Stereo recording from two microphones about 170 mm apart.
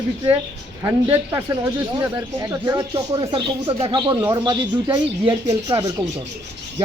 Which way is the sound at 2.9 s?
25° right (ahead or behind).